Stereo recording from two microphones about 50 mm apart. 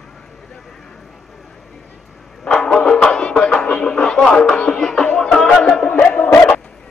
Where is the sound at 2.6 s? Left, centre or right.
Left.